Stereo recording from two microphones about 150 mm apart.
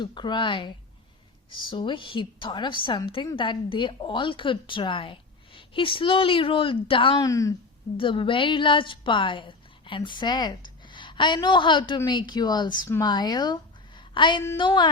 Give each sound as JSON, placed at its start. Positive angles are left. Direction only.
{"t": 0.0, "sound": "a woman's voice", "side_deg": 30}
{"t": 7.3, "sound": "speech", "side_deg": 20}
{"t": 7.9, "sound": "a woman's voice", "side_deg": 35}